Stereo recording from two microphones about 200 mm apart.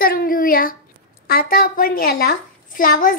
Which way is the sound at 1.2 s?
50° left (ahead or behind).